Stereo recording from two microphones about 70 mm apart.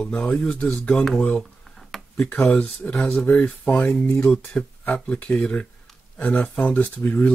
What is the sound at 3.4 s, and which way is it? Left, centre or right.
Speech, centre.